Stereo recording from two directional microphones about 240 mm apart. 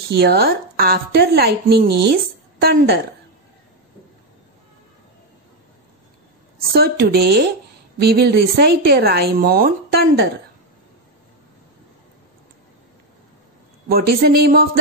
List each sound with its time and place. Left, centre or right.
0.1 s speech: right
6.7 s speech: right
13.8 s speech: right